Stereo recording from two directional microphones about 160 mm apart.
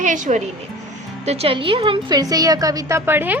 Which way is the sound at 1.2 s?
40° right (ahead or behind).